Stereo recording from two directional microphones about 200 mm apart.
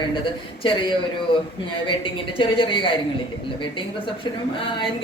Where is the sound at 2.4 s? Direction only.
25° left (ahead or behind).